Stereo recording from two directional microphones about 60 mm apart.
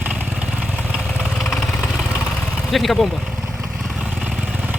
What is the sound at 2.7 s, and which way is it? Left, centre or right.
Speech, centre.